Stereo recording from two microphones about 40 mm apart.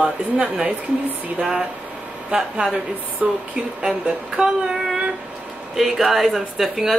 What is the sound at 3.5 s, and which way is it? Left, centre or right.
Speech, right.